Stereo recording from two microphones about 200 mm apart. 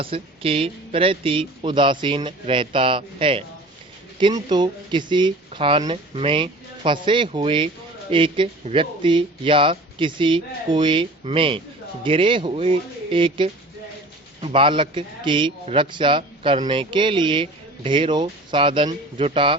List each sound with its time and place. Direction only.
0.0 s a man's voice: 25° right (ahead or behind)